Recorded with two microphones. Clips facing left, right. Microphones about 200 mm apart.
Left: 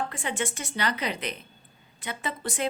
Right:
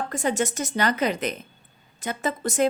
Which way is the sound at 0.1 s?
40° right (ahead or behind).